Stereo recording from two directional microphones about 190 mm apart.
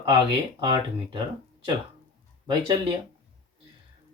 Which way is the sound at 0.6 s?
20° right (ahead or behind).